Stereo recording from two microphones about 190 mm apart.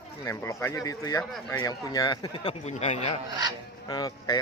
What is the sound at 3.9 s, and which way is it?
Speech, 20° left (ahead or behind).